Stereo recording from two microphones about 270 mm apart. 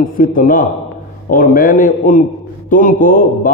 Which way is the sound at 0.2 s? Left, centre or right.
Left.